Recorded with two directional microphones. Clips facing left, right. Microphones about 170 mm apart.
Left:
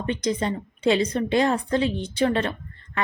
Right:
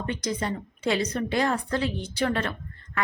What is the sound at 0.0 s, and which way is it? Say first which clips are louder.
A woman's voice: left 4 dB; 20° left (ahead or behind).